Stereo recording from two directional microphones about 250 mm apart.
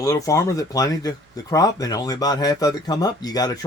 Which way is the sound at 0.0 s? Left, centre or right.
Centre.